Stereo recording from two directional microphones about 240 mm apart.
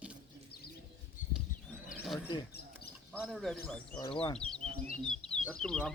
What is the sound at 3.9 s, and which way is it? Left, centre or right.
Speech, centre.